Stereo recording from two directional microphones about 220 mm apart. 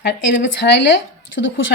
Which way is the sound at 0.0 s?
50° left (ahead or behind).